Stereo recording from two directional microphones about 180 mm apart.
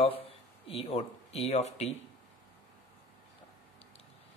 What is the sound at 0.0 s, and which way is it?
Speech, 30° left (ahead or behind).